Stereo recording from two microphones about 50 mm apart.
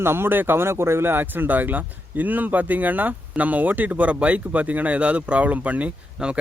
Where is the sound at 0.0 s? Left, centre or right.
Right.